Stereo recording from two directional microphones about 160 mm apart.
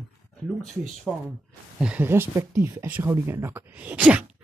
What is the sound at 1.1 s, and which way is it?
Speech, 15° left (ahead or behind).